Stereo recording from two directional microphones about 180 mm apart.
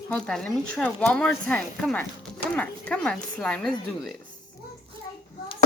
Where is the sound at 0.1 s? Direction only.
5° left (ahead or behind).